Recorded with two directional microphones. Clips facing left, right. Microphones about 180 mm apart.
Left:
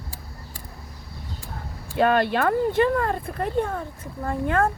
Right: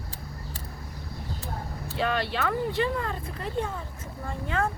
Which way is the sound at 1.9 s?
50° left (ahead or behind).